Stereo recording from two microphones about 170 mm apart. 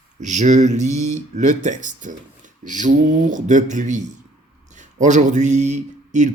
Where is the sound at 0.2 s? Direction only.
45° right (ahead or behind).